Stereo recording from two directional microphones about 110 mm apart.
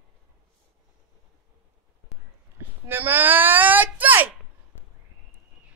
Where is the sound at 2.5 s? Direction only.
20° right (ahead or behind).